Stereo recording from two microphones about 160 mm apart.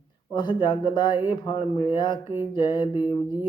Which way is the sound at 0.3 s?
25° left (ahead or behind).